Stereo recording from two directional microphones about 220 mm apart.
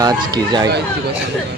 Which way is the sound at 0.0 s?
20° right (ahead or behind).